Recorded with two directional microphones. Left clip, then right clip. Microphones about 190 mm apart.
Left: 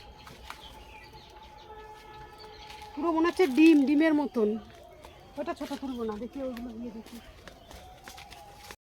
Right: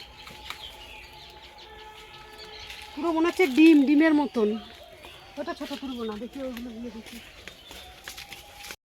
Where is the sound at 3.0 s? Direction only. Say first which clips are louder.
Right 2 dB; 20° right (ahead or behind).